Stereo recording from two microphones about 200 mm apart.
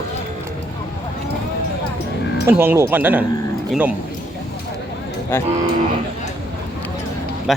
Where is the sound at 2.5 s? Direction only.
10° right (ahead or behind).